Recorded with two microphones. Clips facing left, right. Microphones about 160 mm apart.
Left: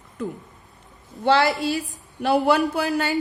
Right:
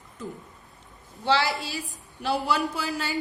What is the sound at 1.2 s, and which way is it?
A woman's voice, 50° left (ahead or behind).